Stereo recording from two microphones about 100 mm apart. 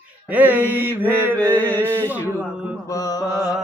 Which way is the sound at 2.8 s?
40° left (ahead or behind).